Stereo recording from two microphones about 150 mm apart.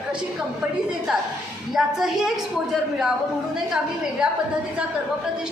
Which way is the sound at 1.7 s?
Centre (ahead or behind).